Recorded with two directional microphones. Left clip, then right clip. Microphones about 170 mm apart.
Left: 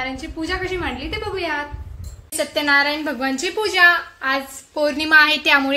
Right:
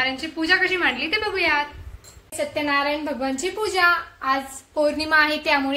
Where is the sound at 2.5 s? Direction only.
55° left (ahead or behind).